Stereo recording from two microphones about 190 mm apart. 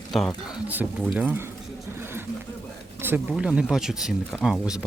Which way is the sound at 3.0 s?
10° right (ahead or behind).